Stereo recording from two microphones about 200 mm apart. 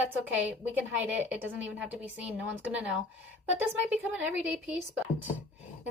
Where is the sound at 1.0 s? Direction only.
10° right (ahead or behind).